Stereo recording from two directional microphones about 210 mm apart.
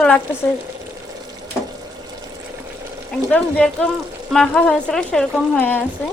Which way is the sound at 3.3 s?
5° left (ahead or behind).